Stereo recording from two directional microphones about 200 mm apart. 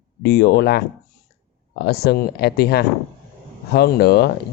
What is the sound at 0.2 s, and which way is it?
Speech, 50° left (ahead or behind).